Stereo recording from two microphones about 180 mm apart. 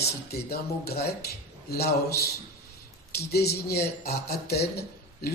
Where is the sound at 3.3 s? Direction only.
65° left (ahead or behind).